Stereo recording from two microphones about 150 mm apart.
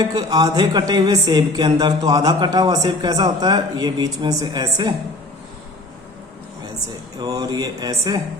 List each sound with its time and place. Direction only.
0.0 s speech: 25° right (ahead or behind)
7.2 s speech: 25° right (ahead or behind)